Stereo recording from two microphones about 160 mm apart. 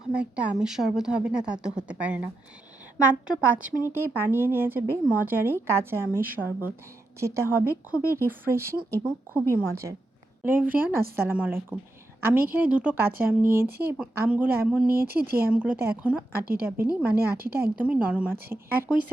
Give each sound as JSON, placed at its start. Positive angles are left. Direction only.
{"t": 0.1, "sound": "a woman's voice", "side_deg": -10}
{"t": 14.8, "sound": "speech", "side_deg": -70}
{"t": 15.4, "sound": "speech", "side_deg": -10}